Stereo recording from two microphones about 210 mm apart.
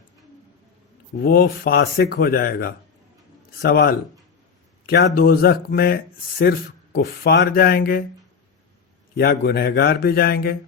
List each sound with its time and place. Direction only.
1.2 s speech: 45° left (ahead or behind)
5.1 s speech: 45° left (ahead or behind)
9.1 s speech: 50° left (ahead or behind)